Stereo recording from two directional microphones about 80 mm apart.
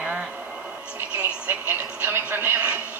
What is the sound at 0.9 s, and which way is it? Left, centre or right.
Television, centre.